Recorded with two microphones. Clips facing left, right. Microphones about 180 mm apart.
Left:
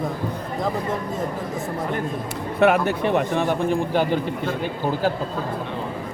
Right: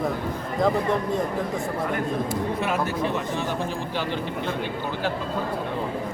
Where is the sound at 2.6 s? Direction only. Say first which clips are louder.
Left 12 dB; 65° left (ahead or behind).